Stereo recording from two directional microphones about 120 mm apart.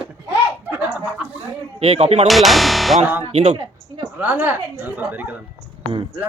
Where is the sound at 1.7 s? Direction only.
55° right (ahead or behind).